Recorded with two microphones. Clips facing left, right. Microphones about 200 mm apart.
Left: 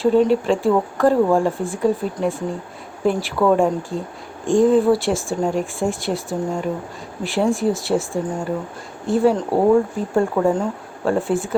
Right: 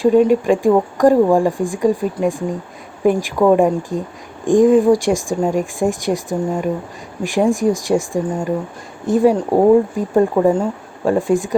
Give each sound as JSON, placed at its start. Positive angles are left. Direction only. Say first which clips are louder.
{"t": 0.0, "sound": "speech", "louder": "right 3 dB", "side_deg": -15}